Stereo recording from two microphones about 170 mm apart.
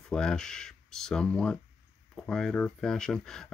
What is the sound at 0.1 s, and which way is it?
Speech, 5° left (ahead or behind).